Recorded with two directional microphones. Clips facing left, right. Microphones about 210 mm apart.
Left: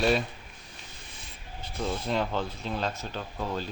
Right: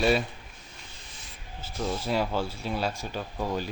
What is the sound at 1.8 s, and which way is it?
Speech, 5° right (ahead or behind).